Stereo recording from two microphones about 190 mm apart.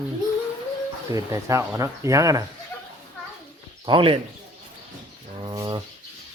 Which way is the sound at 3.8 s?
25° right (ahead or behind).